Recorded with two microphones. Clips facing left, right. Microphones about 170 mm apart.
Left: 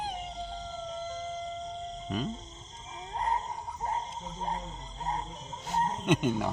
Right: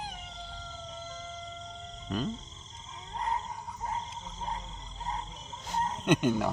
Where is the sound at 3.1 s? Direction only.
35° left (ahead or behind).